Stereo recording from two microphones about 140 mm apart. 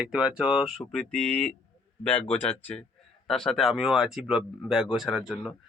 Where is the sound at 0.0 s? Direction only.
5° right (ahead or behind).